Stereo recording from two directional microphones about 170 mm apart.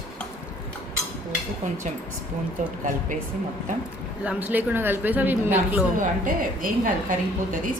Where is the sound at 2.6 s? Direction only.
50° right (ahead or behind).